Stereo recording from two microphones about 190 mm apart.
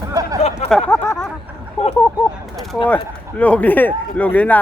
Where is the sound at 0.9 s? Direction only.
15° left (ahead or behind).